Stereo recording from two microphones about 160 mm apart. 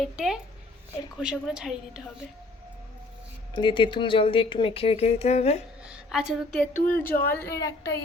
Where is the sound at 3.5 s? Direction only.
30° left (ahead or behind).